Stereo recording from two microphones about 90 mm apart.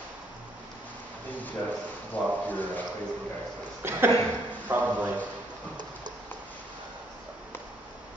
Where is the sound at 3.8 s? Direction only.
25° right (ahead or behind).